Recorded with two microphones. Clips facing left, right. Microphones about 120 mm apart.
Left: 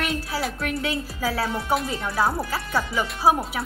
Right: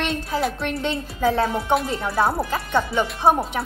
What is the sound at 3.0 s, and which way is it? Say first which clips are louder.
Wind chime: right 1 dB; 5° left (ahead or behind).